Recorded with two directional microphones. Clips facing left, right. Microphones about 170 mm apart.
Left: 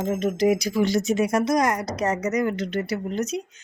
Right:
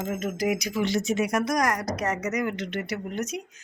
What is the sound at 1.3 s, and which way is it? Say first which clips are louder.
Speech: left 4 dB; 25° left (ahead or behind).